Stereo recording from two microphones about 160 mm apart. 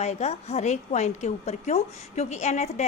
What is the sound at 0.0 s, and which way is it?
A woman's voice, 40° left (ahead or behind).